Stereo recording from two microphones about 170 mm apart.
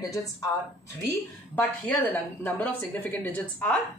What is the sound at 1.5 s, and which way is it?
A woman's voice, 10° left (ahead or behind).